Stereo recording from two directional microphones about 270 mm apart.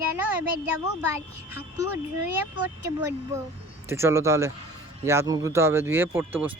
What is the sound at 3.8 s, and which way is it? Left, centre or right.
Speech, centre.